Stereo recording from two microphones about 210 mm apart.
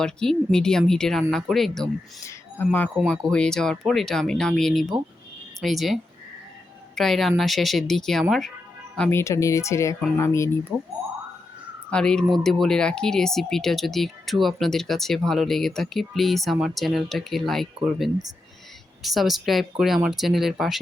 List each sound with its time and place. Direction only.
0.0 s speech: 5° left (ahead or behind)
2.9 s speech: centre (ahead or behind)
9.0 s speech: 10° left (ahead or behind)
10.7 s speech: 5° right (ahead or behind)
11.9 s speech: 5° left (ahead or behind)